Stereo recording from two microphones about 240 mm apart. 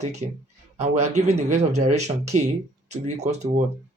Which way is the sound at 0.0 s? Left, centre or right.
Right.